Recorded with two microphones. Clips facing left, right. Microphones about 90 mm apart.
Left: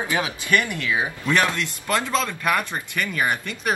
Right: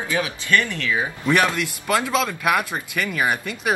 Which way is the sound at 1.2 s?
15° right (ahead or behind).